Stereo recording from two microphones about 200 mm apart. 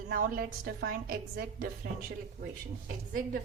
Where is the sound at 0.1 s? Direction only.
45° right (ahead or behind).